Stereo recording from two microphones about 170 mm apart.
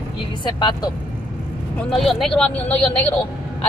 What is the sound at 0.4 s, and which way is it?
Speech, 25° left (ahead or behind).